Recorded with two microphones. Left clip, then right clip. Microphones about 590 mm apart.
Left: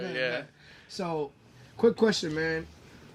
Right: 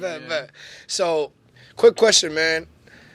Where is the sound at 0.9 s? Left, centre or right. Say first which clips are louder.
Right 12 dB; right.